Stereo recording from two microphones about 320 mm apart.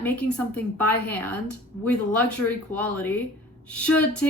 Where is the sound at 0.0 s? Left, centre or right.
Centre.